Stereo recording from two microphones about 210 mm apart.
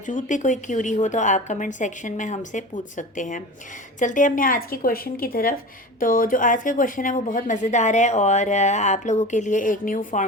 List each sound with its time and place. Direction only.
0.0 s a woman's voice: 35° left (ahead or behind)